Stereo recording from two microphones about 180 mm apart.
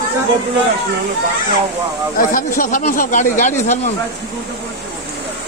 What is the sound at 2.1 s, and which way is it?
Speech, 50° left (ahead or behind).